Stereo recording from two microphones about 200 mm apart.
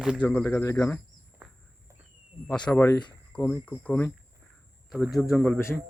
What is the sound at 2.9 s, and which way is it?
Speech, 20° left (ahead or behind).